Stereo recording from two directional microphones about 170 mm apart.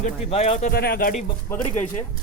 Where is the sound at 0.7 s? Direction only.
65° left (ahead or behind).